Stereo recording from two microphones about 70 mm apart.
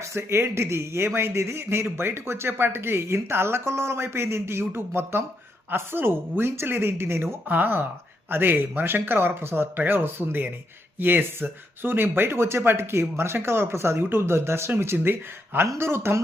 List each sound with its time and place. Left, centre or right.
0.0 s speech: right